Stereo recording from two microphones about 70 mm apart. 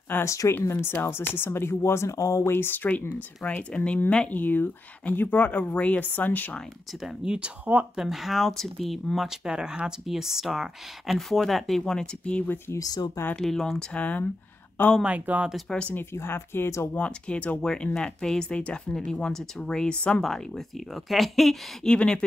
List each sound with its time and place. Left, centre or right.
0.2 s speech: left
0.7 s speech: left
2.5 s speech: left; by 4.4 s centre
4.4 s speech: left
7.0 s speech: centre
7.9 s speech: centre
12.7 s speech: left
13.4 s speech: centre
13.9 s speech: left
15.0 s speech: right
15.9 s speech: left
16.9 s speech: centre
21.8 s speech: centre